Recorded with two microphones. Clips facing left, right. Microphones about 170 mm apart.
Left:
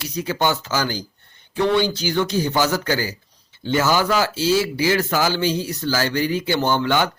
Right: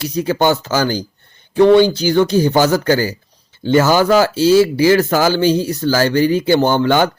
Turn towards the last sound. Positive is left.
turn(degrees=-40)  # may be behind; listen again after turning